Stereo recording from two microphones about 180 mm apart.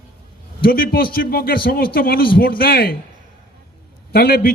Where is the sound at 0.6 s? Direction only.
55° left (ahead or behind).